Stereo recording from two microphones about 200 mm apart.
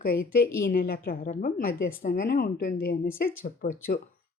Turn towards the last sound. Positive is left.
turn(degrees=45)  # may be behind; listen again after turning